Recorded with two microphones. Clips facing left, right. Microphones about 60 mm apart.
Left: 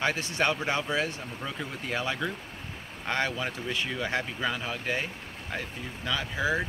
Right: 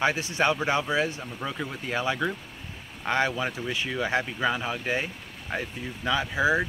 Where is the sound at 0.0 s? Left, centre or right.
Centre.